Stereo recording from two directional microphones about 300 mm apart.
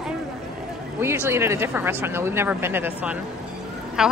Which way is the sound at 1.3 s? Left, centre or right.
Centre.